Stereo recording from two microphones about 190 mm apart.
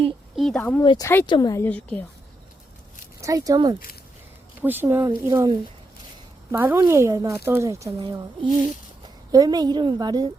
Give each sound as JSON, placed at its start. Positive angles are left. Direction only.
{"t": 0.3, "sound": "speech", "side_deg": 5}
{"t": 0.8, "sound": "a woman's voice", "side_deg": 20}
{"t": 3.2, "sound": "speech", "side_deg": -15}
{"t": 9.3, "sound": "a woman's voice", "side_deg": -20}